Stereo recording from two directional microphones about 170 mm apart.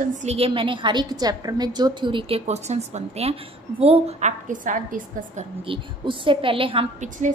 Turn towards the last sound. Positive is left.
turn(degrees=-45)  # may be behind; listen again after turning